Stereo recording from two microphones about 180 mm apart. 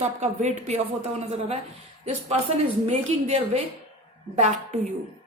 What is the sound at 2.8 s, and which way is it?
A man's voice, 35° right (ahead or behind).